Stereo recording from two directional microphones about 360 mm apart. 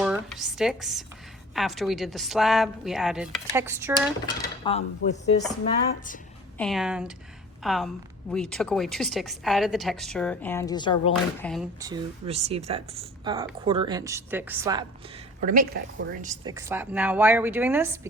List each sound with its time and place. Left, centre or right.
0.0 s a woman's voice: centre
4.6 s speech: centre
6.6 s a woman's voice: centre
11.8 s speech: centre
15.4 s speech: right; by 18.1 s centre